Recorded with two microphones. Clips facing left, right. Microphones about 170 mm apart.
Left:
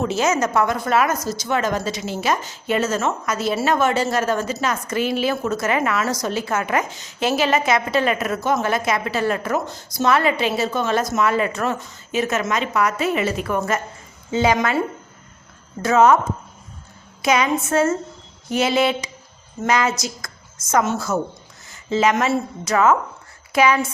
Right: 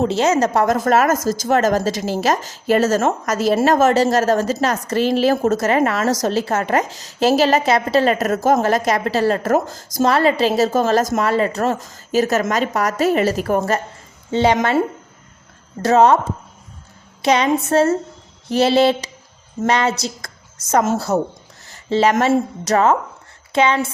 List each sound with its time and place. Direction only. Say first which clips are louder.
0.0 s speech: right 4 dB; 30° right (ahead or behind)
1.2 s speech: right 6 dB; 90° right
1.5 s a woman's voice: right 6 dB; 45° right (ahead or behind)